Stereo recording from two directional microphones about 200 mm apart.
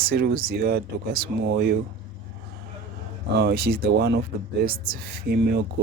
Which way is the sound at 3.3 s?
50° right (ahead or behind).